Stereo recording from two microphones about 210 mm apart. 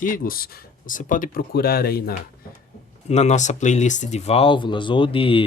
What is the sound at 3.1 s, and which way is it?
Speech, 30° left (ahead or behind).